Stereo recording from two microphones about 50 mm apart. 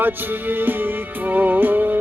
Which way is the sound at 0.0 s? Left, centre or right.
Right.